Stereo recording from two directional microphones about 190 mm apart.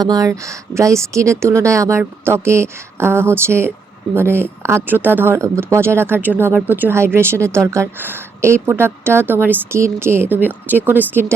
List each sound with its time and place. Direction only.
0.0 s a woman's voice: 20° right (ahead or behind)